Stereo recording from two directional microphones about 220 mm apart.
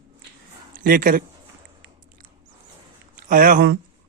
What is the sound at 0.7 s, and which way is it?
Speech, 40° right (ahead or behind).